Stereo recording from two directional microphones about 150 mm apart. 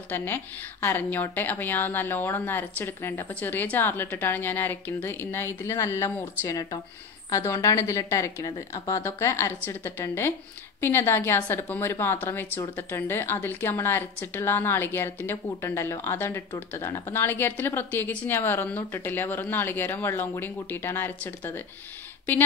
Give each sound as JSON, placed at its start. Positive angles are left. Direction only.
{"t": 0.1, "sound": "a woman's voice", "side_deg": 15}